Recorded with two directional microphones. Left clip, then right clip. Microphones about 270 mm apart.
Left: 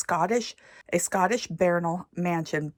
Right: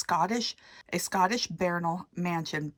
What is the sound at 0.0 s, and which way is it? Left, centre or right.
Speech, centre.